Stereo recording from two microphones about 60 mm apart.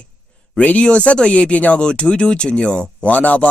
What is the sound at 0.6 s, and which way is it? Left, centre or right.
Speech, left.